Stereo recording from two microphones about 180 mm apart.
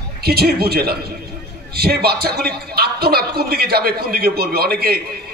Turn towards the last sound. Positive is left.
turn(degrees=-60)  # may be behind; listen again after turning